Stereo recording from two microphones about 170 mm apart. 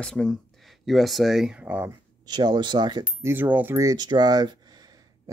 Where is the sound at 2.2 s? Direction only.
25° right (ahead or behind).